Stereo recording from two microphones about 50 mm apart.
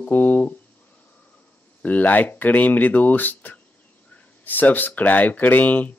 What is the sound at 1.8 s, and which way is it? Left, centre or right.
Speech, left.